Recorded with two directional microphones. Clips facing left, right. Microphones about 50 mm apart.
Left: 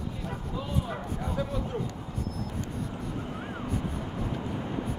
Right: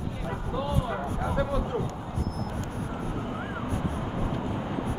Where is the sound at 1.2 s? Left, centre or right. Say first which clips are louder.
Right 4 dB; right.